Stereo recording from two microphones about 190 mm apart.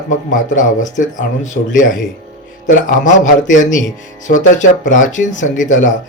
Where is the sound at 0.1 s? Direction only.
40° left (ahead or behind).